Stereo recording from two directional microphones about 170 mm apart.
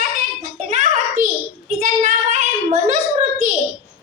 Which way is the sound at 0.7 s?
45° right (ahead or behind).